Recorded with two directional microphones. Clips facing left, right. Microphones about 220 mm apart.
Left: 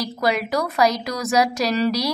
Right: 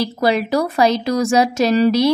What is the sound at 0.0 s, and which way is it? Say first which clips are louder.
A woman's voice: right 5 dB; 30° right (ahead or behind).